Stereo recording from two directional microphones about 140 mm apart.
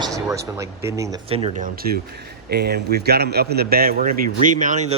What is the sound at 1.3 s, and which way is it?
Speech, 40° right (ahead or behind).